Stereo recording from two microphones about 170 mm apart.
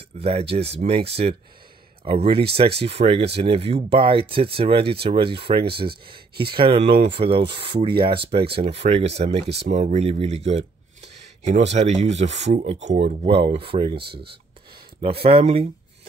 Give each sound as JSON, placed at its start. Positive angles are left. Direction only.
{"t": 0.2, "sound": "speech", "side_deg": -35}
{"t": 15.3, "sound": "speech", "side_deg": -35}